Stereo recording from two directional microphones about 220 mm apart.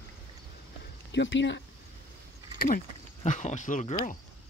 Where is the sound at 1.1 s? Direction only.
55° left (ahead or behind).